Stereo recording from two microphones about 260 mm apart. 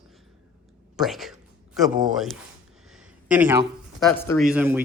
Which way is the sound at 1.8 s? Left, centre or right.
Centre.